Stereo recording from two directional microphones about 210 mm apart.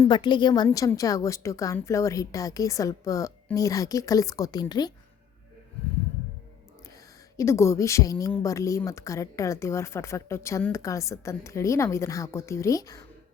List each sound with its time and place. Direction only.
0.0 s speech: 20° left (ahead or behind)
7.3 s speech: 15° left (ahead or behind)